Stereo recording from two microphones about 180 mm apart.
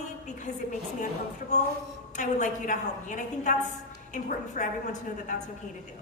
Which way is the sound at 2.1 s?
45° left (ahead or behind).